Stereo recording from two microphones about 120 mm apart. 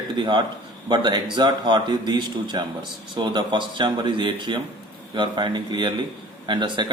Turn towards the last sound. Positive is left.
turn(degrees=-40)  # may be behind; listen again after turning